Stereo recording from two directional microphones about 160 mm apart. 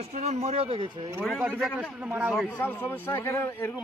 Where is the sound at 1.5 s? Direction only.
Centre (ahead or behind).